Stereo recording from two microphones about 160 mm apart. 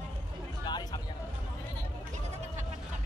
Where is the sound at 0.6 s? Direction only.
25° left (ahead or behind).